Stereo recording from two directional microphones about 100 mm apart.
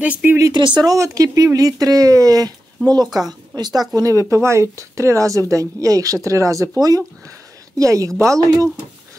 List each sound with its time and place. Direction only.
0.0 s speech: 15° right (ahead or behind)
0.5 s speech: 50° right (ahead or behind)
0.9 s a woman's voice: 35° right (ahead or behind)